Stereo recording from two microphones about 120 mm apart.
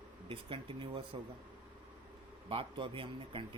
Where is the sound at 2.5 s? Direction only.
45° right (ahead or behind).